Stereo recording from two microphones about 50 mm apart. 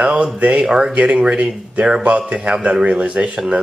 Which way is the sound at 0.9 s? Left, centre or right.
Right.